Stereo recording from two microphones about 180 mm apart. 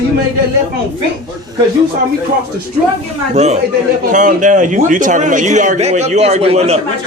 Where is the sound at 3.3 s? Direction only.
40° right (ahead or behind).